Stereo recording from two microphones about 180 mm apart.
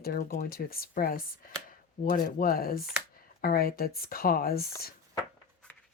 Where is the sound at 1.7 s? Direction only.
55° left (ahead or behind).